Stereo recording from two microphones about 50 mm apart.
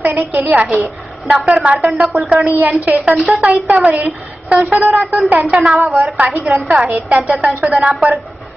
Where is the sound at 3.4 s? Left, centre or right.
Right.